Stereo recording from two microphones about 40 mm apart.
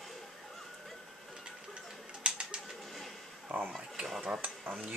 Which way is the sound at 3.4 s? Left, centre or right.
Right.